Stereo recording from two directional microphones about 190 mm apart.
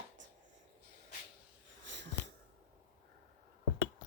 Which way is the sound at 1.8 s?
75° right (ahead or behind).